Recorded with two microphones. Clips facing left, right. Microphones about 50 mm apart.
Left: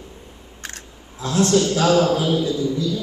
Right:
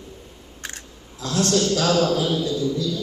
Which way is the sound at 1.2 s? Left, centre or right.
Left.